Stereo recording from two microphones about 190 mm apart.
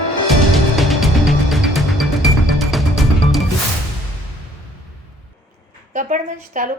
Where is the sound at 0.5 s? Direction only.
Centre (ahead or behind).